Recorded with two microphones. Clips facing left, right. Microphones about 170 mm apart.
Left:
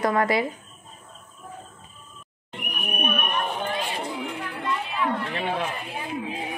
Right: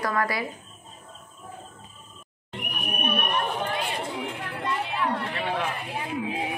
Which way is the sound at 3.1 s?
35° right (ahead or behind).